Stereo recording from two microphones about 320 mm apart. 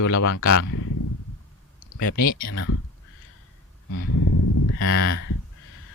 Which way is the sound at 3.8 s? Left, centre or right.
Left.